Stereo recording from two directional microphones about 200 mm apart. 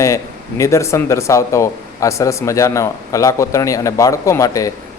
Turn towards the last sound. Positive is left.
turn(degrees=15)  # may be behind; listen again after turning